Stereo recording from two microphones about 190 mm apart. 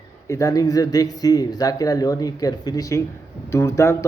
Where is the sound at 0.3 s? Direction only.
15° left (ahead or behind).